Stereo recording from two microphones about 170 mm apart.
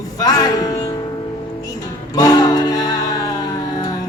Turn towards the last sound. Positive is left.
turn(degrees=25)  # may be behind; listen again after turning